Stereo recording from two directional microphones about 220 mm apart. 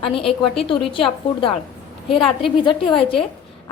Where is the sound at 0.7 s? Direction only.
25° left (ahead or behind).